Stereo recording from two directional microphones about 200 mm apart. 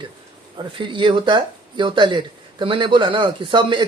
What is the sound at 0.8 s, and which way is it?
Speech, 25° right (ahead or behind).